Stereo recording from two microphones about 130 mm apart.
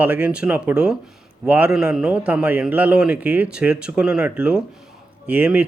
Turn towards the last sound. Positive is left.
turn(degrees=-10)  # may be behind; listen again after turning